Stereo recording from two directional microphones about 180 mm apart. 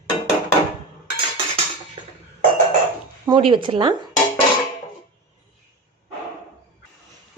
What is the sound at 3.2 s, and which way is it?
Speech, 25° right (ahead or behind).